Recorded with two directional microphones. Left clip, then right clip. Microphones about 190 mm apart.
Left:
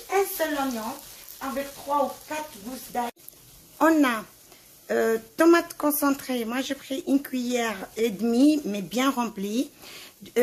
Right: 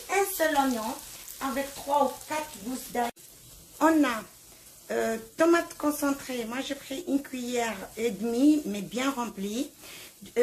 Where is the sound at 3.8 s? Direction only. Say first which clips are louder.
Left 3 dB; 60° left (ahead or behind).